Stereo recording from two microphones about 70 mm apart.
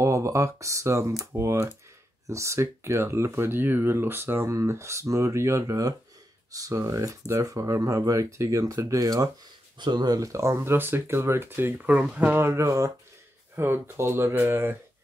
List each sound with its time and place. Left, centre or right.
0.0 s speech: right
9.8 s speech: right
10.2 s speech: right
12.0 s speech: centre
12.3 s speech: right
13.6 s speech: right